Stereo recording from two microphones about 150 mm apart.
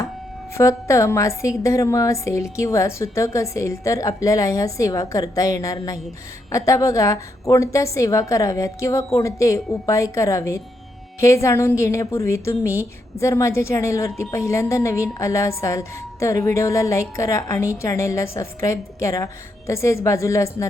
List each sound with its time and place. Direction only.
0.5 s a woman's voice: 20° left (ahead or behind)